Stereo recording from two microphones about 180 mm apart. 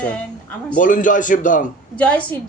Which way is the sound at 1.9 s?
5° left (ahead or behind).